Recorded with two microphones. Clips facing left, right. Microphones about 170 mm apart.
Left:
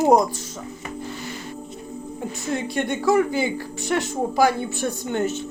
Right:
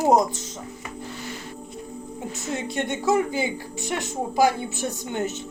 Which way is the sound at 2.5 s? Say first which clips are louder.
Left 3 dB; 20° right (ahead or behind).